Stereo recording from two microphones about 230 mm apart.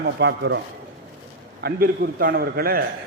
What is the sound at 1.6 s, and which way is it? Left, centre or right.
A man's voice, right.